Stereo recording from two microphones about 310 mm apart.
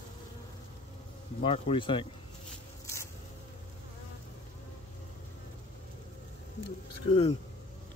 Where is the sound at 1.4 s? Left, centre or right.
Centre.